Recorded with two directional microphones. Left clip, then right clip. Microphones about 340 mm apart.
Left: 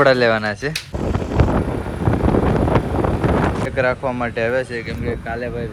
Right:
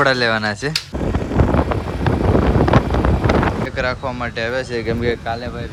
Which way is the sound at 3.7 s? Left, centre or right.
Centre.